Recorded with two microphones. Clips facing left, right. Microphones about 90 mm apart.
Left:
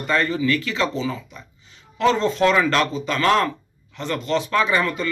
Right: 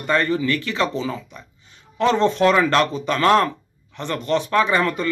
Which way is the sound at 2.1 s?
55° right (ahead or behind).